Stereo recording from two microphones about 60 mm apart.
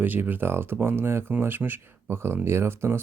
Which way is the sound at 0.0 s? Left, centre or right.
Right.